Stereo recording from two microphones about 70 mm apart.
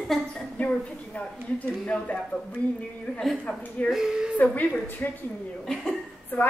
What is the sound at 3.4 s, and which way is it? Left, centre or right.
Speech, centre.